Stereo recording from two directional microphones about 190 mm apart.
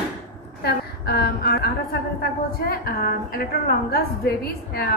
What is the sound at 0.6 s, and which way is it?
A woman's voice, 55° left (ahead or behind).